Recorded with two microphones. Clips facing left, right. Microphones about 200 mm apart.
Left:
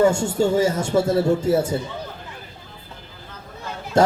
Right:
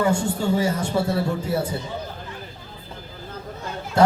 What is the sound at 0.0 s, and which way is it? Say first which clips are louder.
Speech: left 4 dB; 45° left (ahead or behind).